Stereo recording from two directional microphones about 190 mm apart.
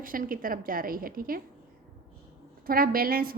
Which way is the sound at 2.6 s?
50° right (ahead or behind).